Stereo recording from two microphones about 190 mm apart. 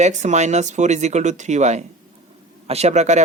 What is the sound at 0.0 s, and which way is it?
Speech, 40° right (ahead or behind).